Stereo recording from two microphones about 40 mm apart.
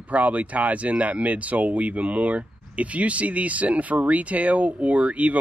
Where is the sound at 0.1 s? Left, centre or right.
Right.